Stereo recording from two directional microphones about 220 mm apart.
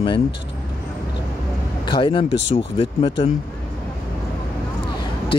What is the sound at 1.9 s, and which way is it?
Speech, 20° left (ahead or behind).